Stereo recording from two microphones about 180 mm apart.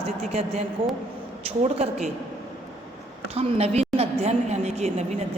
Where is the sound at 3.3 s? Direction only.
35° right (ahead or behind).